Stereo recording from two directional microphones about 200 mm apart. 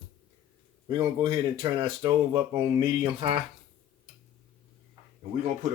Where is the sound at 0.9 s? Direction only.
25° right (ahead or behind).